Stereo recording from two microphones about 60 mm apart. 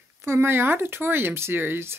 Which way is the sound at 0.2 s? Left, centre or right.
Right.